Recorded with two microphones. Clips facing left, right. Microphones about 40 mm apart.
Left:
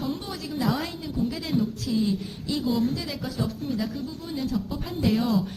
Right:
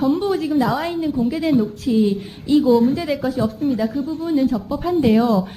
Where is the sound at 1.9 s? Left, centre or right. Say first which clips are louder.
Right 8 dB; right.